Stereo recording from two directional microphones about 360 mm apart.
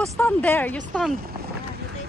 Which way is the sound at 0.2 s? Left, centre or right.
Centre.